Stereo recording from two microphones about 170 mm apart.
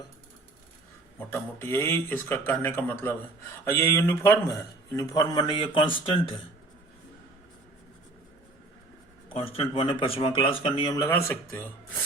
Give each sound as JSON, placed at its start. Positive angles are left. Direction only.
{"t": 1.3, "sound": "a man's voice", "side_deg": 15}
{"t": 9.3, "sound": "speech", "side_deg": 35}